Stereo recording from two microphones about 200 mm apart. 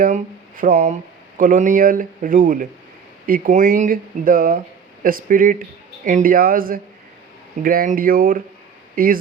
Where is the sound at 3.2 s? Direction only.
45° right (ahead or behind).